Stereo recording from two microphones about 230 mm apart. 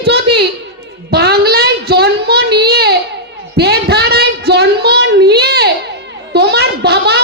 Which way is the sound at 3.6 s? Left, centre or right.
Right.